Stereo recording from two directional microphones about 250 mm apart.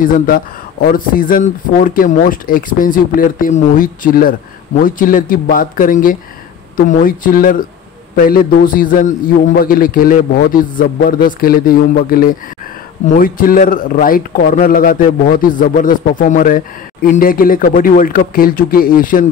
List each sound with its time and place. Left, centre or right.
0.0 s a man's voice: left